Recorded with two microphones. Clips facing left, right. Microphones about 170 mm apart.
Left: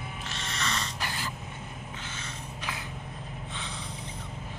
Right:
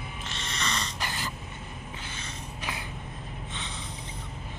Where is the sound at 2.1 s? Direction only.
15° right (ahead or behind).